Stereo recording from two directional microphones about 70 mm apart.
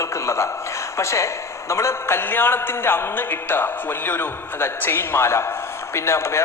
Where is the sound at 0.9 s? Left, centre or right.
Left.